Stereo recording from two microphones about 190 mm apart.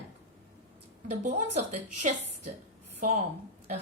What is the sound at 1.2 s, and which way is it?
Speech, 40° right (ahead or behind).